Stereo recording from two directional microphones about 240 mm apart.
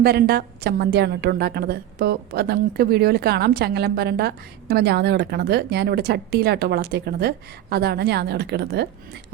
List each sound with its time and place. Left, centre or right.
0.0 s a woman's voice: right